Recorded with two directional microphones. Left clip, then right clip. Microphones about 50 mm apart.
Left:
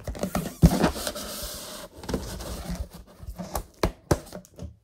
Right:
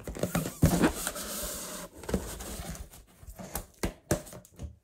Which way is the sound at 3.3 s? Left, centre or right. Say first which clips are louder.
Left 7 dB; left.